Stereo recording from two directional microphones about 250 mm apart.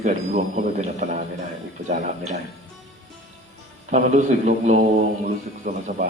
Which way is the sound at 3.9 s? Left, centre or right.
Right.